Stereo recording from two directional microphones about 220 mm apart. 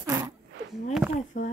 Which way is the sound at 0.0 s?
15° right (ahead or behind).